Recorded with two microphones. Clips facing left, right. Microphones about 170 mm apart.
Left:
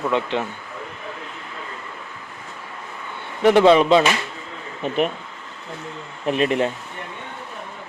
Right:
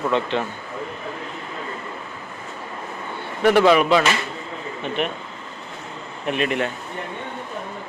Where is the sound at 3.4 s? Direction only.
20° left (ahead or behind).